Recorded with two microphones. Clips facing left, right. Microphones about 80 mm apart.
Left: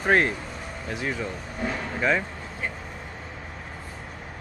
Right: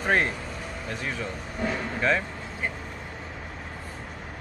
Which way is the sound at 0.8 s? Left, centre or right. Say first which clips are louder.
Left 3 dB; centre.